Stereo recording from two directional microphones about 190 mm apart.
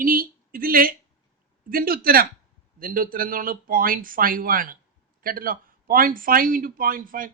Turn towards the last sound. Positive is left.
turn(degrees=-45)  # may be behind; listen again after turning